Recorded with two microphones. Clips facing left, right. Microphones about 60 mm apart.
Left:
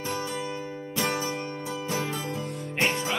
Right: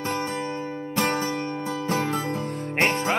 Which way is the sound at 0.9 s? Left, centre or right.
Right.